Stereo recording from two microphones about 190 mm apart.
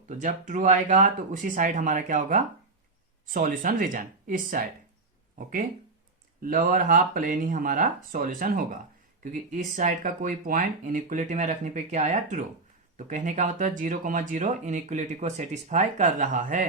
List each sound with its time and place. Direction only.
0.1 s speech: 40° right (ahead or behind)
6.4 s speech: 50° right (ahead or behind)